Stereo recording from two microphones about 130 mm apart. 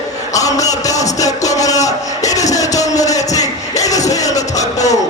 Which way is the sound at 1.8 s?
65° left (ahead or behind).